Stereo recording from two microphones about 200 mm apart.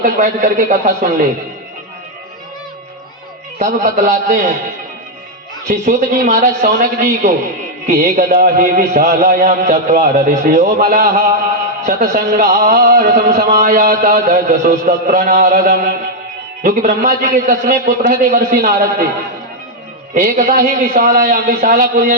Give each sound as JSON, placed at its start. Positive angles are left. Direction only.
{"t": 0.0, "sound": "a man's voice", "side_deg": -40}
{"t": 3.6, "sound": "a man's voice", "side_deg": -40}
{"t": 5.6, "sound": "a man's voice", "side_deg": -35}
{"t": 7.9, "sound": "mantra", "side_deg": -45}
{"t": 9.0, "sound": "a man's voice", "side_deg": -45}
{"t": 11.9, "sound": "mantra", "side_deg": -50}
{"t": 20.1, "sound": "mantra", "side_deg": -45}